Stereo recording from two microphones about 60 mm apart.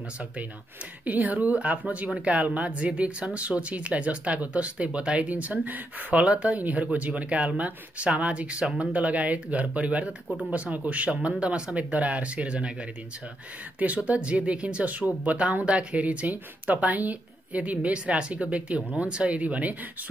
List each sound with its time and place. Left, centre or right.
1.0 s speech: right
6.2 s speech: centre
13.7 s speech: right